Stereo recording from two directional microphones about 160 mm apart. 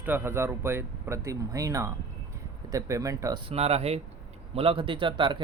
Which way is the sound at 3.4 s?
40° right (ahead or behind).